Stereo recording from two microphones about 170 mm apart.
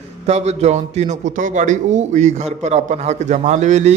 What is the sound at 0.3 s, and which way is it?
A man's voice, 40° right (ahead or behind).